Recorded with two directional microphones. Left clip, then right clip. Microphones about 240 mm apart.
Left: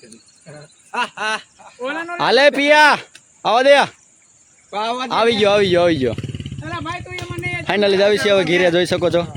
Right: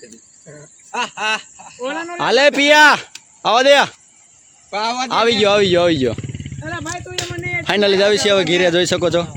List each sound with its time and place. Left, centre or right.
0.9 s speech: centre
4.7 s speech: right
5.0 s speech: centre
6.1 s wild animals: left
6.6 s wild animals: centre
7.2 s a sound: right
7.6 s speech: centre